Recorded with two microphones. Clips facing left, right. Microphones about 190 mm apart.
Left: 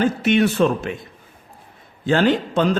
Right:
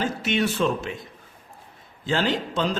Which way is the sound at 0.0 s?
55° left (ahead or behind).